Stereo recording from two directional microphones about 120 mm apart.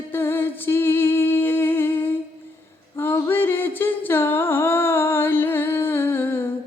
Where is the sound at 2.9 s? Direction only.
20° left (ahead or behind).